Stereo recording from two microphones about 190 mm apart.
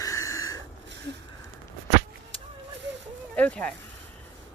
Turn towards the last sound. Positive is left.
turn(degrees=5)  # may be behind; listen again after turning